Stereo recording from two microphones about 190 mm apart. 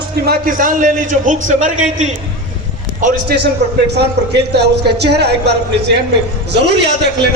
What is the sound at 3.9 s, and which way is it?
A man's voice, 60° right (ahead or behind).